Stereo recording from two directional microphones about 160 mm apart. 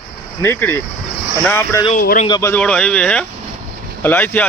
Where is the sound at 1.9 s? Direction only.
60° left (ahead or behind).